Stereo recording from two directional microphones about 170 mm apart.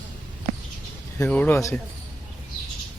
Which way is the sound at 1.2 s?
10° left (ahead or behind).